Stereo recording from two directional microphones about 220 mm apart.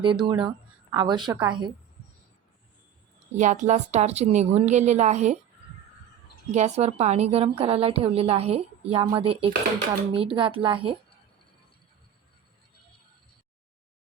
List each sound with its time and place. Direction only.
0.0 s a woman's voice: 20° right (ahead or behind)
3.3 s a woman's voice: 35° right (ahead or behind)
6.5 s a woman's voice: 30° right (ahead or behind)